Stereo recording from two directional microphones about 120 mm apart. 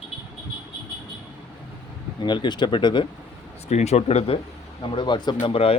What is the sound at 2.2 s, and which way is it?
Speech, 40° left (ahead or behind).